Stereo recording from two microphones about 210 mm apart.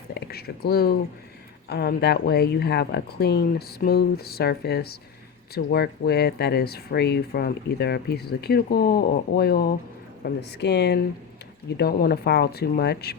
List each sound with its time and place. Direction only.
0.1 s speech: 50° left (ahead or behind)